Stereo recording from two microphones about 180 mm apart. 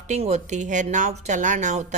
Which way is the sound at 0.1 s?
40° right (ahead or behind).